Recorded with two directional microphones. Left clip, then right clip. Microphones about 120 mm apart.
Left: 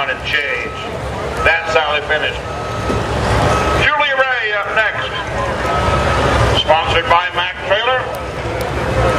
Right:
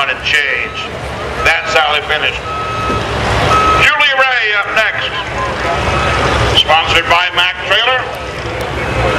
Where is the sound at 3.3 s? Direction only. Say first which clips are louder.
Right 6 dB; 30° right (ahead or behind).